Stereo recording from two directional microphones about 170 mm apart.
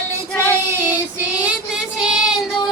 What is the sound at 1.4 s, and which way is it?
Child singing, 5° right (ahead or behind).